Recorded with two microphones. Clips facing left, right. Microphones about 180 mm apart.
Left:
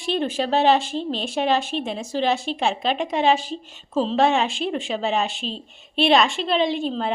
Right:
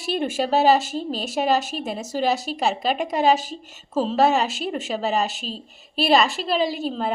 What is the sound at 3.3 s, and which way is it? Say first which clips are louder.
Speech: even; 45° right (ahead or behind).